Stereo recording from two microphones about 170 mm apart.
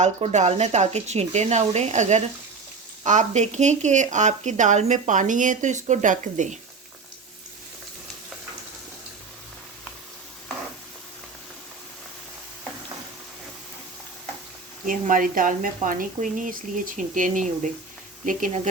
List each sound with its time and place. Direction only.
0.0 s speech: 40° right (ahead or behind)
14.8 s speech: 50° right (ahead or behind)